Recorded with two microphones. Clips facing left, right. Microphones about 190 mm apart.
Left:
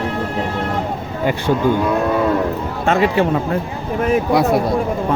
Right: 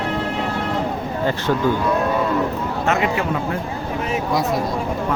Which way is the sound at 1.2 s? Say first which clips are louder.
Left 3 dB; 15° left (ahead or behind).